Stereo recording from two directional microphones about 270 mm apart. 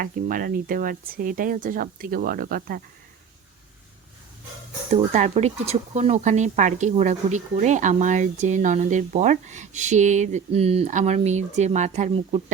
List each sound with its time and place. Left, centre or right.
0.0 s speech: right
4.9 s speech: right